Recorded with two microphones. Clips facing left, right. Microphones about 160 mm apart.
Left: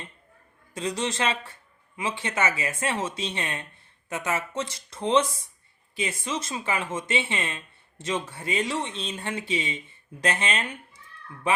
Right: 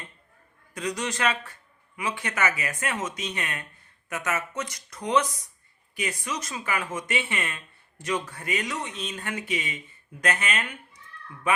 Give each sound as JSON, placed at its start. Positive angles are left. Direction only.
{"t": 0.7, "sound": "speech", "side_deg": 25}